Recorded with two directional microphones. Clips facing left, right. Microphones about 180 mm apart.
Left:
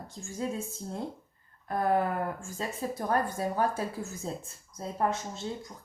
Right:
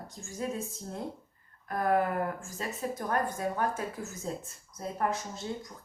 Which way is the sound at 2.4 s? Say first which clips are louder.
Left 1 dB; 30° left (ahead or behind).